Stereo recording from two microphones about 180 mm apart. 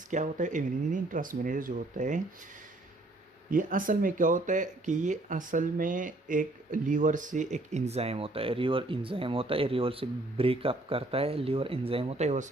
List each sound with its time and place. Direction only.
0.1 s speech: 45° right (ahead or behind)
3.5 s speech: 50° right (ahead or behind)